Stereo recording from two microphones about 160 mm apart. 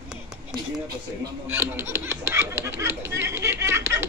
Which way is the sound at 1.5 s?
15° right (ahead or behind).